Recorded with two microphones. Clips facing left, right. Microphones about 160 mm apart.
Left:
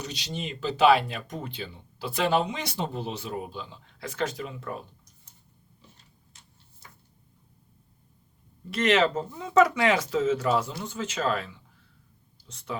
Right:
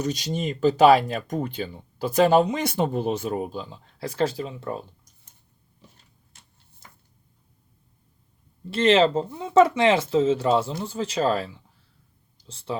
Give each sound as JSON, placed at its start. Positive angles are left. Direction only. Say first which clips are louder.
{"t": 0.0, "sound": "speech", "louder": "right 8 dB", "side_deg": -45}
{"t": 8.7, "sound": "speech", "louder": "right 5 dB", "side_deg": -30}